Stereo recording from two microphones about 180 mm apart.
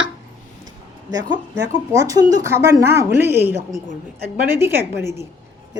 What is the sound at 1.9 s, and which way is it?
Speech, 20° right (ahead or behind).